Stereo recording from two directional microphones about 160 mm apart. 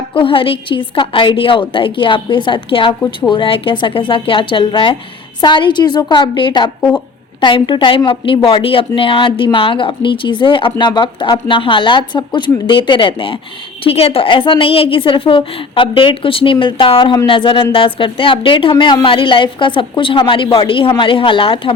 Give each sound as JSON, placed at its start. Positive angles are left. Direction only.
{"t": 0.1, "sound": "a woman's voice", "side_deg": 35}